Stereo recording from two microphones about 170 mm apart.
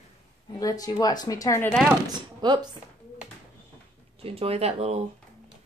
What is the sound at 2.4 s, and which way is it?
Speech, 25° right (ahead or behind).